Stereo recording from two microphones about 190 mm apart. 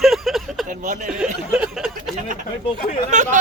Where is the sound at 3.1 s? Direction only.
40° right (ahead or behind).